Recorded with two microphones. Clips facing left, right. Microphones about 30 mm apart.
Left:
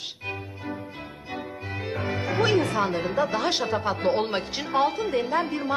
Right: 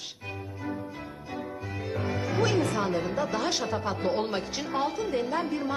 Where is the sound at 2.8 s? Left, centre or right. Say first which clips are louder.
Left 3 dB; left.